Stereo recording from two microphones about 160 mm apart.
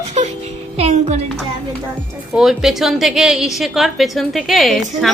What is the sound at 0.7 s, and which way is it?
Music, 45° right (ahead or behind).